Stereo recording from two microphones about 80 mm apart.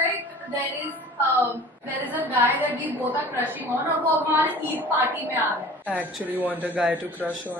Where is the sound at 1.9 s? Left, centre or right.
Right.